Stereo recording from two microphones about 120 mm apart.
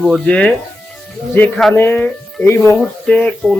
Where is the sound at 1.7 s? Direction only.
20° left (ahead or behind).